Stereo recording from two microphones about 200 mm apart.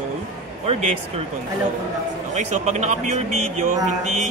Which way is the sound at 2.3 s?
35° right (ahead or behind).